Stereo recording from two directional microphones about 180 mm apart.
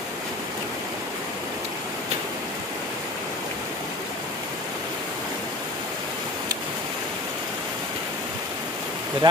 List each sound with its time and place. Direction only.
9.2 s speech: 25° right (ahead or behind)